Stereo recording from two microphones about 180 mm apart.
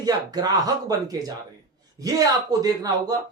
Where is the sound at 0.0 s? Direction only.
20° right (ahead or behind).